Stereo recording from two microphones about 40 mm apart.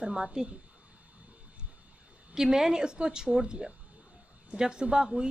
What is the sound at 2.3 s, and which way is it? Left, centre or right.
A woman's voice, centre.